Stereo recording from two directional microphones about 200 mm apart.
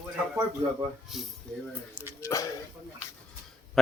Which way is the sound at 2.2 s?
15° left (ahead or behind).